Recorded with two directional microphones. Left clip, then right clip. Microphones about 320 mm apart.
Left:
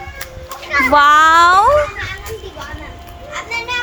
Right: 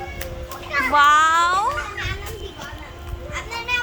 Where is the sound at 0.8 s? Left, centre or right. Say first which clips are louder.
Left 5 dB; centre.